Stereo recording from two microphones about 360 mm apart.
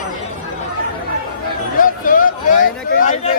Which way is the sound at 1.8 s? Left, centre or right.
Left.